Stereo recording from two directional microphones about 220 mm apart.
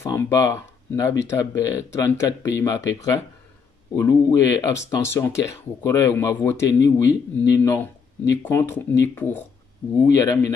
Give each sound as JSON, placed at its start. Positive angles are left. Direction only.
{"t": 0.0, "sound": "speech", "side_deg": 15}